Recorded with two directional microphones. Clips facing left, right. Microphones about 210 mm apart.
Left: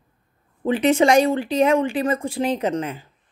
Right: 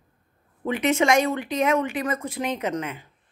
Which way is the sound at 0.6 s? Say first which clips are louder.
Left 5 dB; 30° left (ahead or behind).